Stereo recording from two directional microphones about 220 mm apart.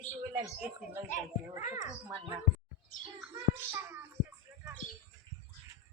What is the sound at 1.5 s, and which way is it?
Speech, 35° left (ahead or behind).